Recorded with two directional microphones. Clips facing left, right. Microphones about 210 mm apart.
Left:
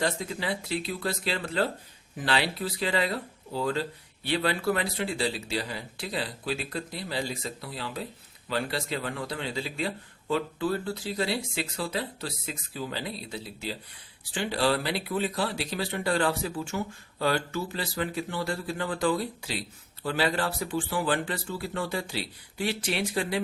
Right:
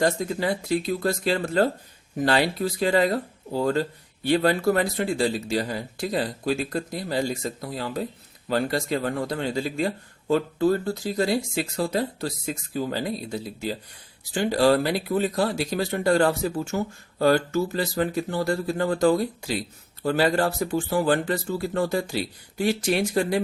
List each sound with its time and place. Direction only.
0.0 s speech: 45° right (ahead or behind)